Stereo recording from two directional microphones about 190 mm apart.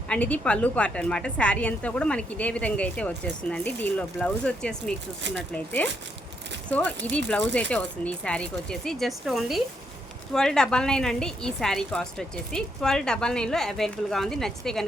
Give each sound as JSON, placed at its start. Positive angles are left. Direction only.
{"t": 0.1, "sound": "a woman's voice", "side_deg": 5}